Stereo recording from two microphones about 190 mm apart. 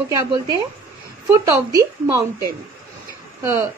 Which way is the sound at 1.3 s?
15° right (ahead or behind).